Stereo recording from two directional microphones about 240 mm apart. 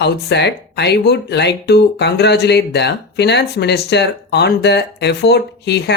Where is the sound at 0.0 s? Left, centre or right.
Left.